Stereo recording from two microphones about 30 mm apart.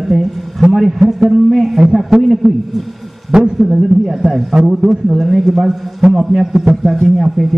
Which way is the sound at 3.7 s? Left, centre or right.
Centre.